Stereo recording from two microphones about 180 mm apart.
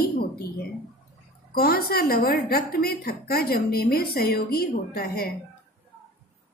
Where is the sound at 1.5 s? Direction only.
60° left (ahead or behind).